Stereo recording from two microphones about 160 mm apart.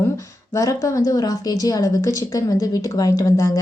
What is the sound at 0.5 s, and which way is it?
A woman's voice, 20° left (ahead or behind).